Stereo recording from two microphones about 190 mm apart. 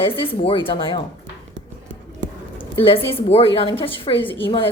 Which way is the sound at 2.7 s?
30° left (ahead or behind).